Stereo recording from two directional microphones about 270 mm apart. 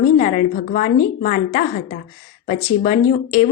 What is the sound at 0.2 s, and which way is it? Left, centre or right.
A woman's voice, left.